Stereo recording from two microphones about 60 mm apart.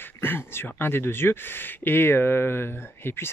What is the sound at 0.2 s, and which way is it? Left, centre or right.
Speech, left.